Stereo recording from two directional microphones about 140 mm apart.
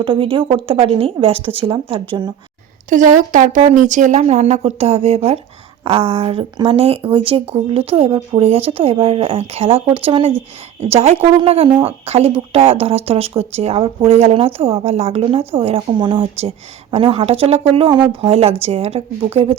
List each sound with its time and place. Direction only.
0.0 s speech: 40° right (ahead or behind)
2.9 s a woman's voice: 65° right (ahead or behind); by 19.5 s 45° right (ahead or behind)